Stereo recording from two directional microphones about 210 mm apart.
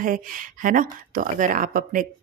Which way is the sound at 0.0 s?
40° right (ahead or behind).